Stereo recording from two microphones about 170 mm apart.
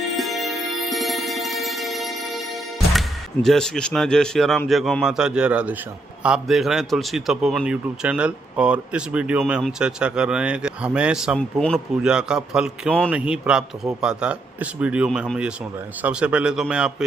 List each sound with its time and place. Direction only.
0.2 s music: centre (ahead or behind)
3.4 s a man's voice: 5° left (ahead or behind)
11.3 s a man's voice: 5° left (ahead or behind)
12.0 s a man's voice: 5° right (ahead or behind)